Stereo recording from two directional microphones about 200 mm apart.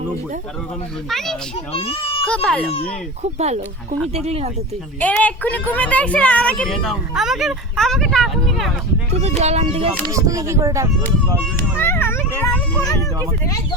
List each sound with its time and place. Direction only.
1.1 s a child's voice: centre (ahead or behind)
1.7 s a child's voice: 30° left (ahead or behind)
2.2 s a child's voice: 5° left (ahead or behind)
3.3 s speech: 35° right (ahead or behind)
4.9 s speech: 5° left (ahead or behind)
9.4 s speech: 30° right (ahead or behind)
10.1 s speech: 15° right (ahead or behind)
11.8 s children playing: 10° left (ahead or behind)